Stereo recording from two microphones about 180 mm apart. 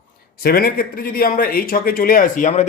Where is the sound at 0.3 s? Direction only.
55° left (ahead or behind).